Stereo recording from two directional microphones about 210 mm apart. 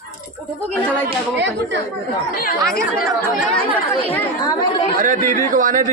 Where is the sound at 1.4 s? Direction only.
55° right (ahead or behind).